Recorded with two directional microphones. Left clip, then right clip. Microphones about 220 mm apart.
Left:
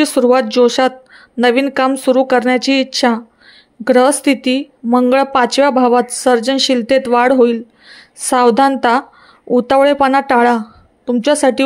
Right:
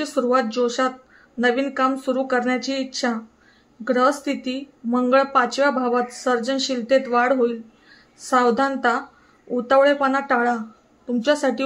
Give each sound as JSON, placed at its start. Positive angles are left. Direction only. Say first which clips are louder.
{"t": 0.0, "sound": "speech", "louder": "left 9 dB", "side_deg": 35}